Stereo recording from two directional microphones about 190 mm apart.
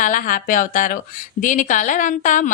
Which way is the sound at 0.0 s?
45° left (ahead or behind).